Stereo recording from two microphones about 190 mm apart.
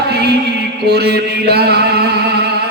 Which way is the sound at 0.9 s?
55° right (ahead or behind).